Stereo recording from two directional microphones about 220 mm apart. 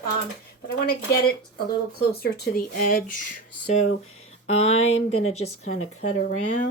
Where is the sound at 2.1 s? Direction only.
45° left (ahead or behind).